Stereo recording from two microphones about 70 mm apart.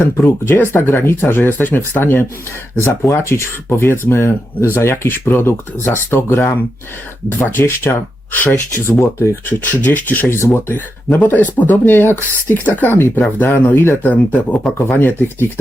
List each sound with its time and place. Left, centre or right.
0.0 s speech: left
8.9 s speech: left
9.5 s speech: left